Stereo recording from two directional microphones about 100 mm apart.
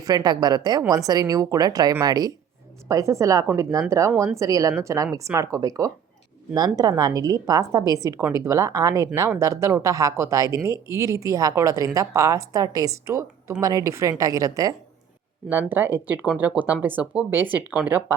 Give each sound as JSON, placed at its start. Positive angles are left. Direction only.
{"t": 0.0, "sound": "a woman's voice", "side_deg": -40}
{"t": 2.9, "sound": "a woman's voice", "side_deg": -30}
{"t": 15.4, "sound": "speech", "side_deg": -20}